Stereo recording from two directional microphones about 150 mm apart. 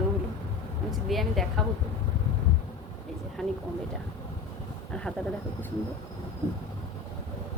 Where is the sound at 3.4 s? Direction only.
Centre (ahead or behind).